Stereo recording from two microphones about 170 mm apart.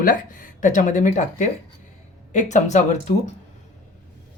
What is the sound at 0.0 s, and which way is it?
Speech, 55° left (ahead or behind).